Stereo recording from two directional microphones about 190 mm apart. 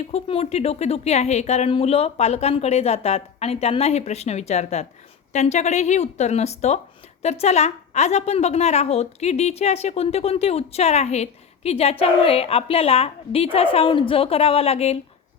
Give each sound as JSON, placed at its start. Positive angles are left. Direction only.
{"t": 0.0, "sound": "a woman's voice", "side_deg": 30}